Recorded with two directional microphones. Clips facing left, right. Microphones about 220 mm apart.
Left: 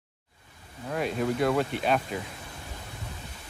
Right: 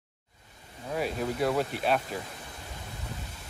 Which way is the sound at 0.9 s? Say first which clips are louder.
Left 3 dB; centre (ahead or behind).